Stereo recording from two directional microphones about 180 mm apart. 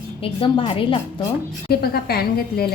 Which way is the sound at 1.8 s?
60° left (ahead or behind).